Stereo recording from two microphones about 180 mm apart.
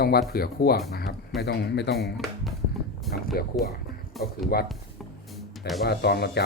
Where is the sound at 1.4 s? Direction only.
70° left (ahead or behind).